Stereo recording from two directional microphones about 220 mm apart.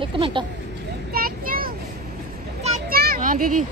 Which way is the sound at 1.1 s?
40° right (ahead or behind).